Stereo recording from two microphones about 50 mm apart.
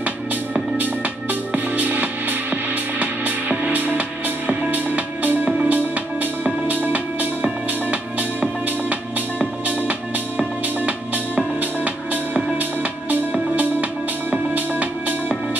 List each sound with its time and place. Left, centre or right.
1.5 s music: right